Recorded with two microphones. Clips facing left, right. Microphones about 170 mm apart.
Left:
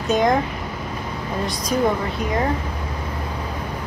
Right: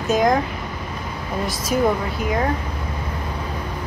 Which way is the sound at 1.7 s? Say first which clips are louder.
Right 1 dB; 10° right (ahead or behind).